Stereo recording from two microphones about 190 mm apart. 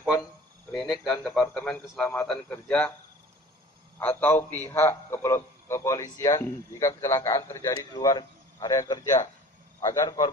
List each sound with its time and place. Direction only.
0.7 s a sound: centre (ahead or behind)
1.0 s a man's voice: 5° left (ahead or behind)
4.0 s a man's voice: 10° left (ahead or behind)